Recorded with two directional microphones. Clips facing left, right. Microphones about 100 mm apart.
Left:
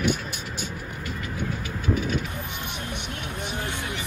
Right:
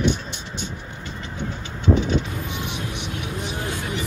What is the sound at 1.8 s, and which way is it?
Vehicle, 25° right (ahead or behind).